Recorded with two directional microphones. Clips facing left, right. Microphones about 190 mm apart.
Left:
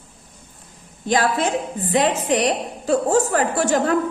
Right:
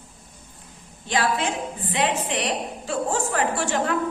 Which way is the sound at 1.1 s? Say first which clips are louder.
Left 5 dB; 40° left (ahead or behind).